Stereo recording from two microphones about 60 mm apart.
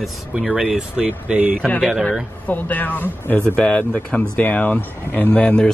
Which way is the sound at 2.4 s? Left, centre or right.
Left.